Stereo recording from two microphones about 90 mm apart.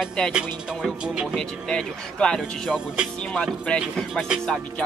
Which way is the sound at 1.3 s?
10° left (ahead or behind).